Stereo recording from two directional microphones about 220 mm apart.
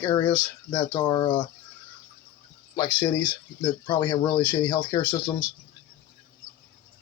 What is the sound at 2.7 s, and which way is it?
Speech, 20° left (ahead or behind).